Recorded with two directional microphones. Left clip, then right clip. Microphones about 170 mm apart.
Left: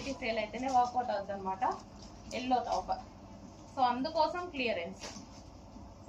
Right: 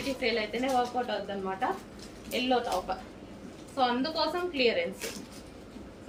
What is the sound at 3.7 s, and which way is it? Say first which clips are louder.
A woman's voice: right 2 dB; 30° right (ahead or behind).